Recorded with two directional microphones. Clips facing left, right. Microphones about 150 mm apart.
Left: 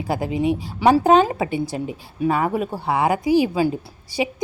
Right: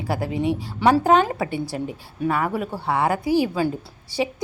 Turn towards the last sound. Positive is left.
turn(degrees=15)  # may be behind; listen again after turning